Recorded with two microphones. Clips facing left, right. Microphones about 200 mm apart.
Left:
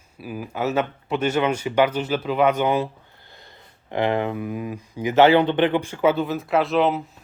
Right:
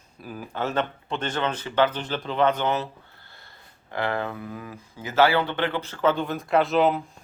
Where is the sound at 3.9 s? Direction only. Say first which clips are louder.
Left 6 dB; 20° left (ahead or behind); by 7.0 s centre (ahead or behind).